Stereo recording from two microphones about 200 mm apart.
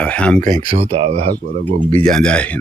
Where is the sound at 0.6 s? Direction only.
25° right (ahead or behind).